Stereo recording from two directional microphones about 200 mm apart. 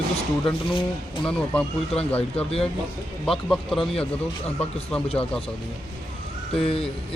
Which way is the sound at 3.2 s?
Centre (ahead or behind).